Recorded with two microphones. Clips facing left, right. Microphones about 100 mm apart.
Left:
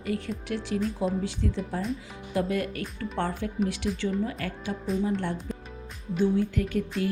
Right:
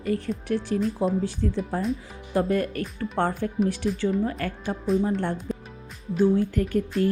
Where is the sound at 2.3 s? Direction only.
40° right (ahead or behind).